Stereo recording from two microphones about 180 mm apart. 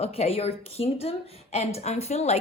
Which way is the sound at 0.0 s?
35° left (ahead or behind).